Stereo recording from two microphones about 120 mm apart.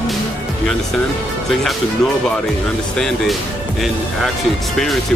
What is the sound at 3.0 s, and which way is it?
Speech, 5° left (ahead or behind).